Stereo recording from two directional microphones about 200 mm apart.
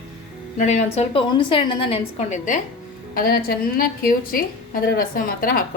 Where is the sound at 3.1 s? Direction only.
45° left (ahead or behind).